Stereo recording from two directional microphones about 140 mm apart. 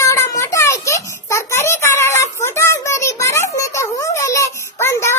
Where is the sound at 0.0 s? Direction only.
20° left (ahead or behind).